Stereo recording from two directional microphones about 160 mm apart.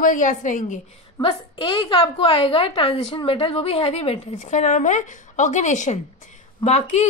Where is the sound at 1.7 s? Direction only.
30° left (ahead or behind).